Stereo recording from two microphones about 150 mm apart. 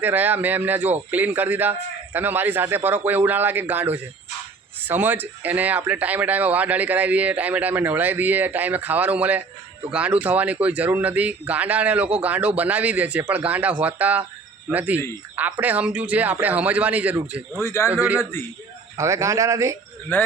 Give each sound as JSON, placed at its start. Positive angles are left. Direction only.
{"t": 0.0, "sound": "a man's voice", "side_deg": -10}
{"t": 17.6, "sound": "a man's voice", "side_deg": 20}
{"t": 17.9, "sound": "a man's voice", "side_deg": -10}
{"t": 18.2, "sound": "a man's voice", "side_deg": 15}
{"t": 18.9, "sound": "speech", "side_deg": -20}